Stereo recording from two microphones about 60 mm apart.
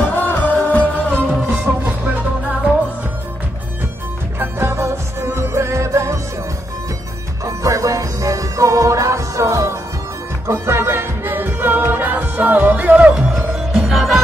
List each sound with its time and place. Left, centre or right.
0.0 s music: left
1.4 s music: right
4.4 s music: right
7.4 s music: right
13.8 s music: centre